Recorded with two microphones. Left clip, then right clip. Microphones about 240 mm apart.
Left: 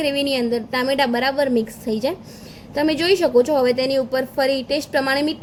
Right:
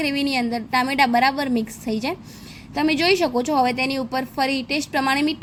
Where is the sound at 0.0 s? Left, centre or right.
Centre.